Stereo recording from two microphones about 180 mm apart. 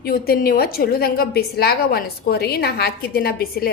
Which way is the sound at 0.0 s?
55° left (ahead or behind).